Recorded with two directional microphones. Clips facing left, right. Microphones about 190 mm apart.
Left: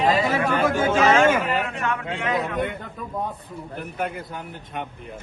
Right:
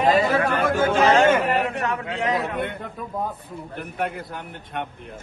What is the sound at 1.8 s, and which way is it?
Speech, 40° right (ahead or behind).